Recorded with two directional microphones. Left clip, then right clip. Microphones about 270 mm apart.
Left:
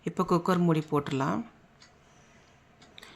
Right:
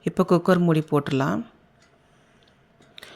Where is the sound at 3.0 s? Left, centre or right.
Centre.